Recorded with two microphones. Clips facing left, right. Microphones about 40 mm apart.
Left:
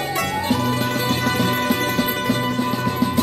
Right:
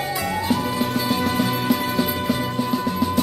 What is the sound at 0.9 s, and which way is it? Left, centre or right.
Music, left.